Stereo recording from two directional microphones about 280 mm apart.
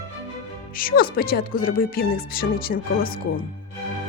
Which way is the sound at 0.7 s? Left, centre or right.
Left.